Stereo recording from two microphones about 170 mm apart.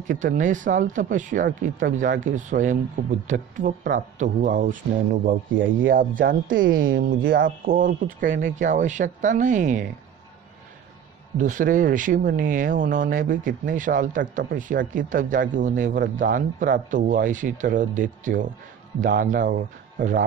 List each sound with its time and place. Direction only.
0.0 s speech: 50° right (ahead or behind)
11.3 s speech: 50° right (ahead or behind)